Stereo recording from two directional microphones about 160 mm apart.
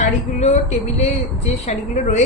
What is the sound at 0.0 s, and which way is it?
A woman's voice, 45° left (ahead or behind).